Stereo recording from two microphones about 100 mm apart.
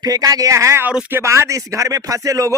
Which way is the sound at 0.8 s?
15° right (ahead or behind).